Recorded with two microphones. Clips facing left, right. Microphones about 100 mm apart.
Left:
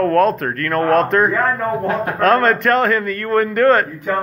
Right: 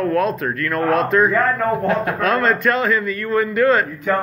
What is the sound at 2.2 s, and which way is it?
A man's voice, 50° left (ahead or behind).